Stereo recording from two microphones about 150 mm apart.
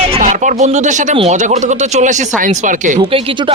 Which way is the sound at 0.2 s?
55° right (ahead or behind).